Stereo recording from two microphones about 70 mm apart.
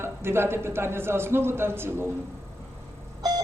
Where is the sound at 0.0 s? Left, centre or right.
Right.